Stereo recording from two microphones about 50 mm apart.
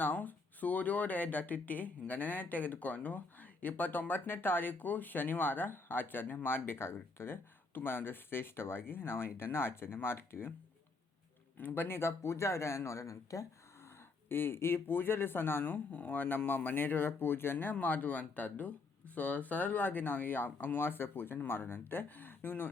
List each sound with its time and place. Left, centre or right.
0.0 s speech: left
11.5 s speech: left
14.3 s speech: left